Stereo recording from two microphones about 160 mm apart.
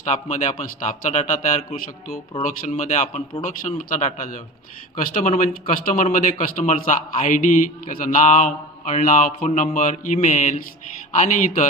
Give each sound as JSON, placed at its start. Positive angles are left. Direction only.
{"t": 0.0, "sound": "a man's voice", "side_deg": 50}